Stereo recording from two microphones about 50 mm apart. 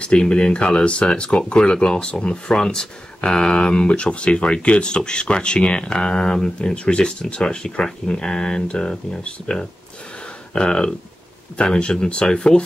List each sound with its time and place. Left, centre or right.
0.0 s speech: centre